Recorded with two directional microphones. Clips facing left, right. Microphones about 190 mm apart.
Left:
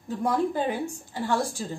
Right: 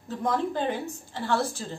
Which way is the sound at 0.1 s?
10° left (ahead or behind).